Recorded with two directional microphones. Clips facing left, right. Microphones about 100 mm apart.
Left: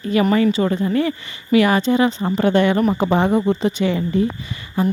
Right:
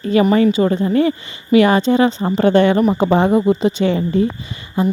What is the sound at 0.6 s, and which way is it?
Speech, 30° right (ahead or behind).